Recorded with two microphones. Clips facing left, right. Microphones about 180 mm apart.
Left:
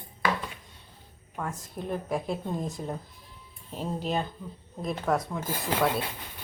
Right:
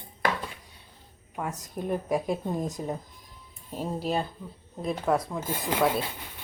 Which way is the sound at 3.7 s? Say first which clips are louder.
Right 1 dB; 10° right (ahead or behind).